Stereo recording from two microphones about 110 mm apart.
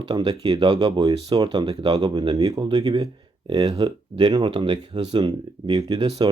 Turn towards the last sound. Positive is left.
turn(degrees=-40)  # may be behind; listen again after turning